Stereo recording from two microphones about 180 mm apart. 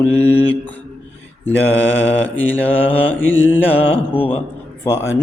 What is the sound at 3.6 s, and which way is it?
Mantra, 10° left (ahead or behind).